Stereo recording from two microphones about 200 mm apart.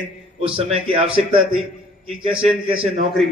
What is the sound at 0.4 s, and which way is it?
Speech, 30° right (ahead or behind).